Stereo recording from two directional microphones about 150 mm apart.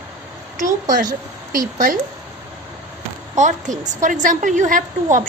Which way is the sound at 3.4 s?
55° right (ahead or behind).